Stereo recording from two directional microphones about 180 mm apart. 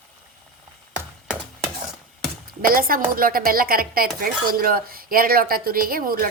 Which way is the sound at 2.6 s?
55° right (ahead or behind).